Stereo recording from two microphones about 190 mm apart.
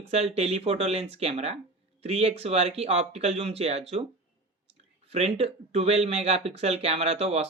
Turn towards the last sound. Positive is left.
turn(degrees=-35)  # may be behind; listen again after turning